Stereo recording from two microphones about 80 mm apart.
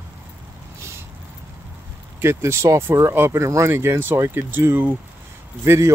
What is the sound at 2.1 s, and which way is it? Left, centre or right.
Speech, right.